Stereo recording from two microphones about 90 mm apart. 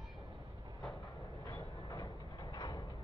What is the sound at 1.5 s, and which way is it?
Train, 65° left (ahead or behind).